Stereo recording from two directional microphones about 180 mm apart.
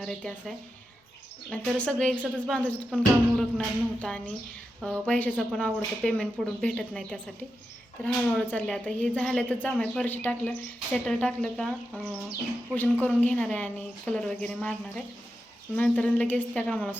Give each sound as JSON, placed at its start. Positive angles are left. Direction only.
{"t": 0.0, "sound": "a woman's voice", "side_deg": 5}
{"t": 12.7, "sound": "a woman's voice", "side_deg": 10}